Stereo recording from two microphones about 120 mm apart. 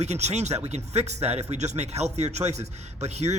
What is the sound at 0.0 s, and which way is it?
Speech, 65° right (ahead or behind).